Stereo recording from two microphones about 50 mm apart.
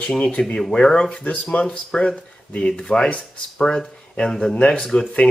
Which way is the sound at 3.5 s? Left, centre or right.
Centre.